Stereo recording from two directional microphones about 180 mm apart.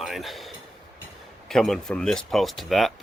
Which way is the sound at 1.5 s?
Centre (ahead or behind).